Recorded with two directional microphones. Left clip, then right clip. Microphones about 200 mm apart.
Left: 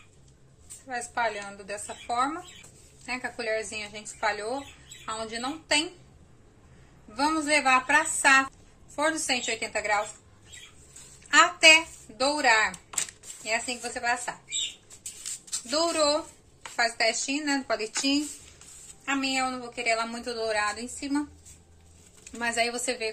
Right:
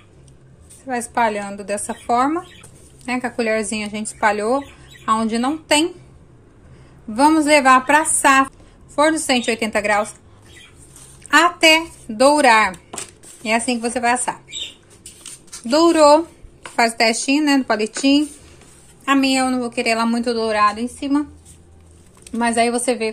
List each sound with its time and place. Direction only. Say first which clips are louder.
0.8 s a woman's voice: right 10 dB; 50° right (ahead or behind)
7.2 s a woman's voice: right 11 dB; 45° right (ahead or behind)
11.2 s a woman's voice: right 5 dB; 45° right (ahead or behind)
15.7 s a woman's voice: right 13 dB; 45° right (ahead or behind)
19.0 s a woman's voice: right 11 dB; 50° right (ahead or behind); by 21.2 s 25° right (ahead or behind)
22.2 s speech: right 10 dB; 25° right (ahead or behind)